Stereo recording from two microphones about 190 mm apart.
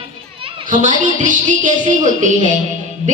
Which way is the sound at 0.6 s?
45° right (ahead or behind).